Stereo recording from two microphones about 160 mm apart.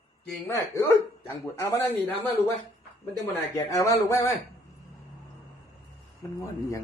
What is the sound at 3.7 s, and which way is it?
Speech, 20° left (ahead or behind).